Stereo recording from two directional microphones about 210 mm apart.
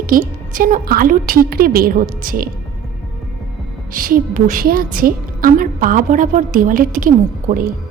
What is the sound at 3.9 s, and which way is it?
A woman's voice, 40° right (ahead or behind).